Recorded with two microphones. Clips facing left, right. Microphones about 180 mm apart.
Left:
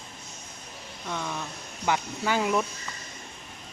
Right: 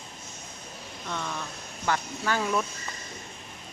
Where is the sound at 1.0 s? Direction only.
10° left (ahead or behind).